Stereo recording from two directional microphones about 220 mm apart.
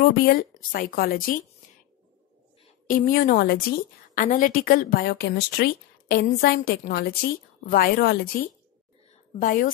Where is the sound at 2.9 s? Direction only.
40° left (ahead or behind).